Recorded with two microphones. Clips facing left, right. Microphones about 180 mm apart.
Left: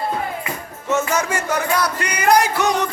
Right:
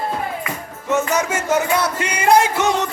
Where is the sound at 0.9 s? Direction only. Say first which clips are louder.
Right 1 dB; 20° right (ahead or behind).